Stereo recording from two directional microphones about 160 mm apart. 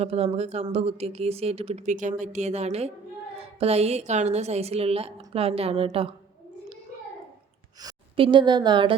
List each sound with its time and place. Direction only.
0.0 s speech: 40° right (ahead or behind)
7.8 s a woman's voice: 30° right (ahead or behind)